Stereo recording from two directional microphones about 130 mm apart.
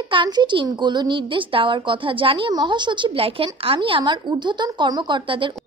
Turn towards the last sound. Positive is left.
turn(degrees=-40)  # may be behind; listen again after turning